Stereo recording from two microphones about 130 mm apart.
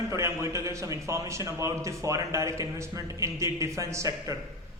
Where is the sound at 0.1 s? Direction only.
25° right (ahead or behind).